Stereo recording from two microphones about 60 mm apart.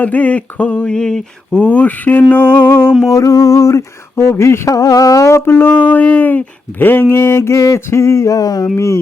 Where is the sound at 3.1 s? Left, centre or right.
Left.